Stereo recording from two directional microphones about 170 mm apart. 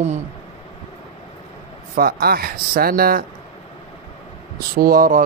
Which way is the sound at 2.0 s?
65° right (ahead or behind).